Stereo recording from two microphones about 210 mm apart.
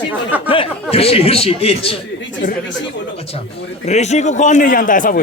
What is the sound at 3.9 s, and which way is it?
A man's voice, 30° left (ahead or behind).